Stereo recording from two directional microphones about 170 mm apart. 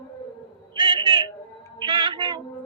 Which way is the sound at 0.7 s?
30° right (ahead or behind).